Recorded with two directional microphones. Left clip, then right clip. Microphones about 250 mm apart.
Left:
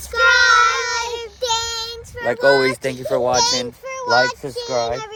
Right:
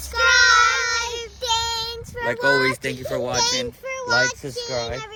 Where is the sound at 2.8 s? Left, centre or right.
Centre.